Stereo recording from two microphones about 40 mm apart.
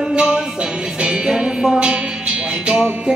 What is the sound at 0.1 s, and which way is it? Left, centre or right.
Music, right.